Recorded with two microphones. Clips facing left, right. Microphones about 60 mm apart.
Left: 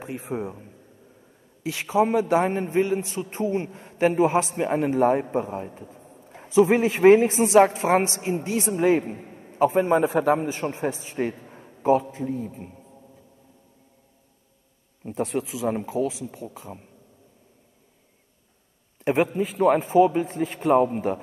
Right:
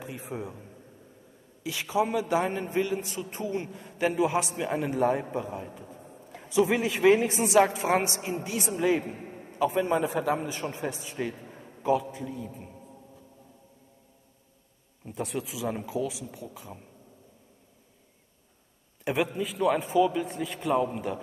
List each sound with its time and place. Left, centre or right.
0.0 s a man's voice: left
11.4 s a sound: centre
11.8 s a man's voice: left
15.0 s a man's voice: left
19.0 s a man's voice: left